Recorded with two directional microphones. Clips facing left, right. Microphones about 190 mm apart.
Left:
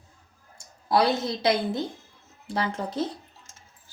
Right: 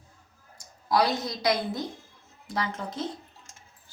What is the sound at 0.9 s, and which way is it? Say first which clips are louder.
A woman's voice: left 2 dB; 25° left (ahead or behind).